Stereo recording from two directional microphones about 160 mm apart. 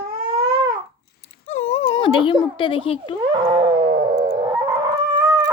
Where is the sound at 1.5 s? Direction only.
45° left (ahead or behind).